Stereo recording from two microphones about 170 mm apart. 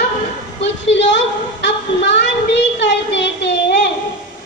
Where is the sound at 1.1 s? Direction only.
90° left.